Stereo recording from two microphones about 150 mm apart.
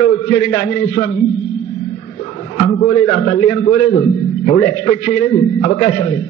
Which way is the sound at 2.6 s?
45° left (ahead or behind).